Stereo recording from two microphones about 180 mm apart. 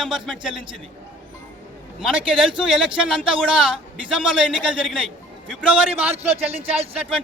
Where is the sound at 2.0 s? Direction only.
5° right (ahead or behind).